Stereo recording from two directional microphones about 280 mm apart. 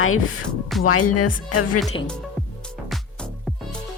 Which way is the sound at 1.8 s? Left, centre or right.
Left.